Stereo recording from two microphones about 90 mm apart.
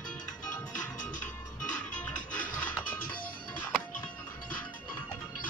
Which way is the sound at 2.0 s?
15° left (ahead or behind).